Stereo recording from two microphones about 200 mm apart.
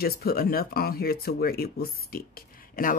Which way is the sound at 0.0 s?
50° left (ahead or behind).